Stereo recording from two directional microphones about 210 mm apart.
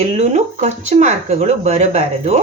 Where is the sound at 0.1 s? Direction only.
30° right (ahead or behind).